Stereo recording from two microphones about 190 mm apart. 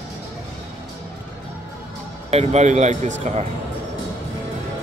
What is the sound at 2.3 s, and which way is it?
Speech, 35° right (ahead or behind).